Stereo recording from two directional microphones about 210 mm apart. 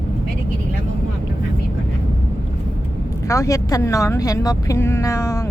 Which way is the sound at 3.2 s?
15° left (ahead or behind).